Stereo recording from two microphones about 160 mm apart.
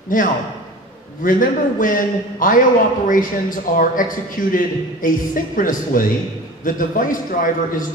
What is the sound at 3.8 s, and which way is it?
Speech, 60° left (ahead or behind).